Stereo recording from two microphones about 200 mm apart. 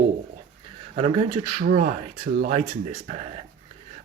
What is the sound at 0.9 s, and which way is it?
Speech, 30° right (ahead or behind).